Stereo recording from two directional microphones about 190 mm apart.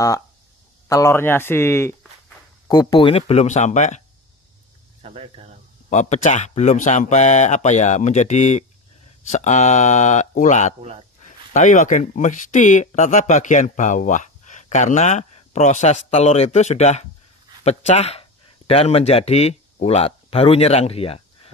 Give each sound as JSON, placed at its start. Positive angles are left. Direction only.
{"t": 0.8, "sound": "speech", "side_deg": 15}
{"t": 5.0, "sound": "speech", "side_deg": -30}
{"t": 5.9, "sound": "speech", "side_deg": 35}
{"t": 10.8, "sound": "speech", "side_deg": -30}
{"t": 11.2, "sound": "speech", "side_deg": 40}